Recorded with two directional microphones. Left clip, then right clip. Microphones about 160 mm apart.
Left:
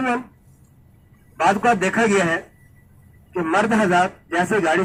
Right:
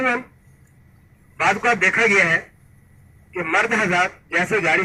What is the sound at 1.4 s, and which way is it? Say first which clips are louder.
Speech: even; 40° left (ahead or behind).